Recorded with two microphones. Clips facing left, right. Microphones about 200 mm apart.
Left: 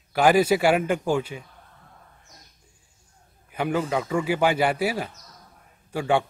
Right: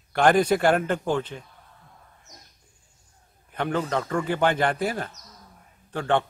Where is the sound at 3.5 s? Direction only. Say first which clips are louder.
Left 1 dB; 5° left (ahead or behind).